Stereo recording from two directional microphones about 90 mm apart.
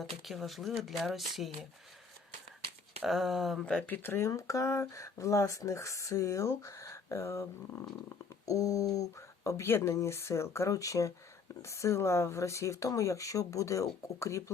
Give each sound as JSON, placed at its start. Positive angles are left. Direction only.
{"t": 0.3, "sound": "speech", "side_deg": 0}
{"t": 3.0, "sound": "speech", "side_deg": 0}
{"t": 3.8, "sound": "speech", "side_deg": 25}
{"t": 8.4, "sound": "speech", "side_deg": 40}